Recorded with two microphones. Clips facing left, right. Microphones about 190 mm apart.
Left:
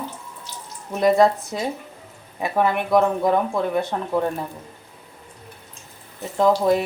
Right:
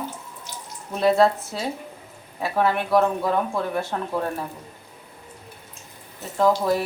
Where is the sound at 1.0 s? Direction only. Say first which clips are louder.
Left 2 dB; 15° left (ahead or behind).